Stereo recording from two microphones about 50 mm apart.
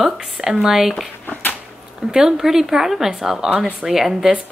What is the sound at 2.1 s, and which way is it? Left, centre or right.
Speech, centre.